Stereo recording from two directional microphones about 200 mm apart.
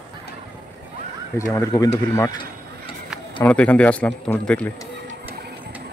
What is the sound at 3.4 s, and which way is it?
Speech, 5° left (ahead or behind).